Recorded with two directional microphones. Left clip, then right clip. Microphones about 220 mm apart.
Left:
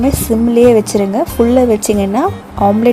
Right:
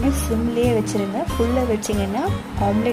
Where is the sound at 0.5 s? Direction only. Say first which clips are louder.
Left 13 dB; 35° left (ahead or behind).